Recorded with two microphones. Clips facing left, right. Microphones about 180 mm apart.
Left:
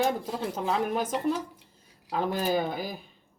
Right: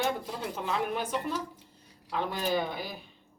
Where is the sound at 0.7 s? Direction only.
40° left (ahead or behind).